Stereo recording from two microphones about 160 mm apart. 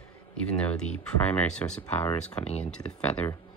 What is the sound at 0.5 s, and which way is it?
Speech, 5° left (ahead or behind).